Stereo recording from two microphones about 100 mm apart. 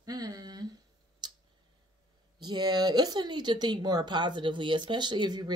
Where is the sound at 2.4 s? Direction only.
45° right (ahead or behind).